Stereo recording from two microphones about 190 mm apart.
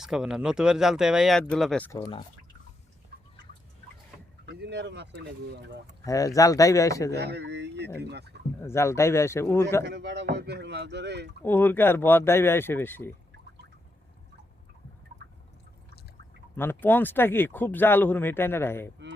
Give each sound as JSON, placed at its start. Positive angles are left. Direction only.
{"t": 0.0, "sound": "speech", "side_deg": -5}
{"t": 4.4, "sound": "speech", "side_deg": -65}
{"t": 6.1, "sound": "speech", "side_deg": 15}
{"t": 7.1, "sound": "speech", "side_deg": -60}
{"t": 8.6, "sound": "speech", "side_deg": 15}
{"t": 9.8, "sound": "speech", "side_deg": -65}
{"t": 11.4, "sound": "speech", "side_deg": 10}
{"t": 16.6, "sound": "speech", "side_deg": 10}